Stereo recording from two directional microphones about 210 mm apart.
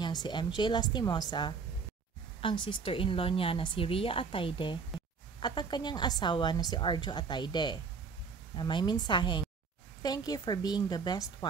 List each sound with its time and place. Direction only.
0.0 s a woman's voice: 20° left (ahead or behind)